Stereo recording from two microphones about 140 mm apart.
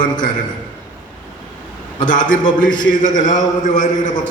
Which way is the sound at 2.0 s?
70° left (ahead or behind).